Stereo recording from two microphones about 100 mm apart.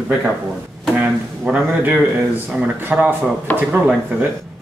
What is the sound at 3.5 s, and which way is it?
Speech, 15° left (ahead or behind).